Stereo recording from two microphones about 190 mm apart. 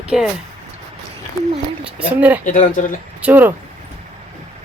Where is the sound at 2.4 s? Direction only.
45° left (ahead or behind).